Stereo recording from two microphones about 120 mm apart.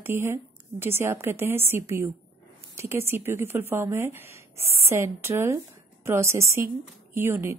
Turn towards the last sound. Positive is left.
turn(degrees=-20)  # may be behind; listen again after turning